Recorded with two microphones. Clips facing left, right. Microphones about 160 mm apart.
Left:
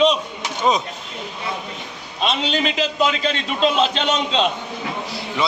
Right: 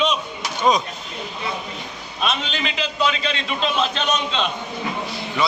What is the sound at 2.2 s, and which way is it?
A man's voice, 30° left (ahead or behind).